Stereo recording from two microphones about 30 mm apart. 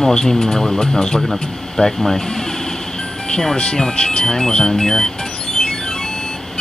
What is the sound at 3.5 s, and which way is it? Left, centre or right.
Speech, left.